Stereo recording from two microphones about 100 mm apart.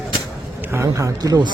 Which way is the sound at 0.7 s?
30° right (ahead or behind).